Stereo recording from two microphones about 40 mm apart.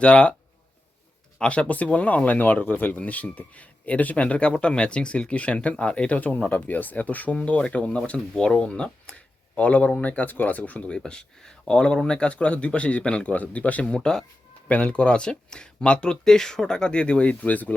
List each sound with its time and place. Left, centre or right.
0.0 s speech: left
1.4 s speech: left
3.0 s speech: left
6.1 s speech: left
10.9 s speech: left
13.3 s speech: left
13.9 s speech: centre
14.7 s speech: left
16.2 s speech: centre
17.3 s speech: left